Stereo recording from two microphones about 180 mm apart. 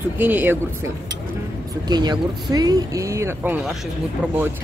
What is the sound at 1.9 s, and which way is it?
Speech, 25° right (ahead or behind).